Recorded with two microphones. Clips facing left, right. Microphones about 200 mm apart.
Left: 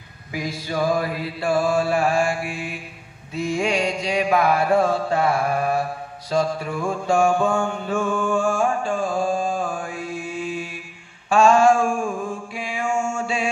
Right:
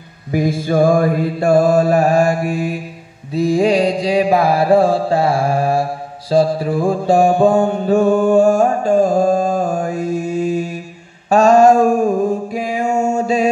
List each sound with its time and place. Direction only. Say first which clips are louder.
0.3 s mantra: right 11 dB; 50° right (ahead or behind)